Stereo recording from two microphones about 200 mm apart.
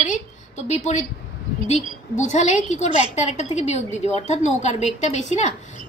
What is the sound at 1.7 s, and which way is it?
A woman's voice, 35° left (ahead or behind).